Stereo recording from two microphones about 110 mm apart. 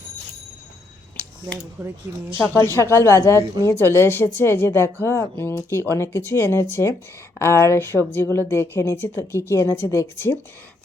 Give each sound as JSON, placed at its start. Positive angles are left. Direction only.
{"t": 1.8, "sound": "speech", "side_deg": -15}
{"t": 2.4, "sound": "a woman's voice", "side_deg": 20}